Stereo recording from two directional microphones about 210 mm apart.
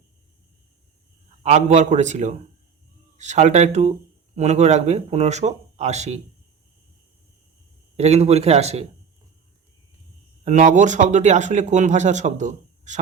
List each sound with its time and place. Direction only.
1.5 s speech: 35° right (ahead or behind)
7.9 s speech: 30° right (ahead or behind)
10.4 s speech: 35° right (ahead or behind)